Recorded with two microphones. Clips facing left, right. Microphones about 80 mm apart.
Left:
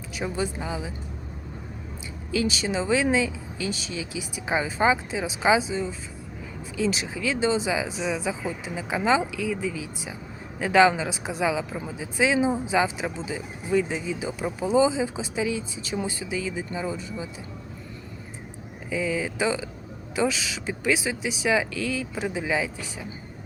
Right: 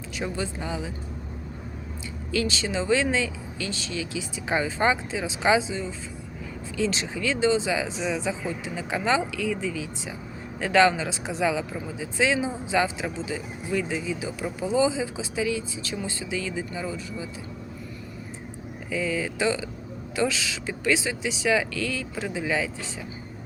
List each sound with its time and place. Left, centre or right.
0.2 s speech: centre
2.3 s speech: centre
6.7 s speech: centre
18.9 s speech: centre